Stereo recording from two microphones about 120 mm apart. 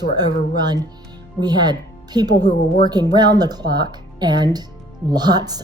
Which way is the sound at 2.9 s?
35° right (ahead or behind).